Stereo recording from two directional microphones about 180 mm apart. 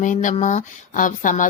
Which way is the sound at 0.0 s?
45° left (ahead or behind).